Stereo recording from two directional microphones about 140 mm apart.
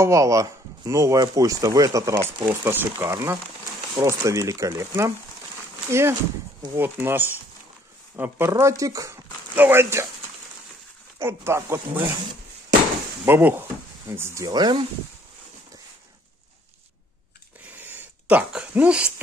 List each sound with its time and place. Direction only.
0.0 s speech: 20° right (ahead or behind)
11.2 s speech: 20° right (ahead or behind)
13.2 s speech: 15° right (ahead or behind); by 14.9 s 35° right (ahead or behind)
17.6 s a sound: 15° right (ahead or behind)